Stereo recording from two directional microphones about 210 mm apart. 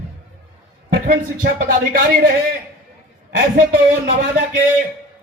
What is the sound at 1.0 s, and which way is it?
Speech, 45° right (ahead or behind).